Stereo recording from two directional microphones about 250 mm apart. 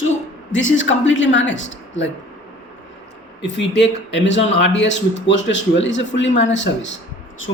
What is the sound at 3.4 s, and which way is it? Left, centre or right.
Speech, left.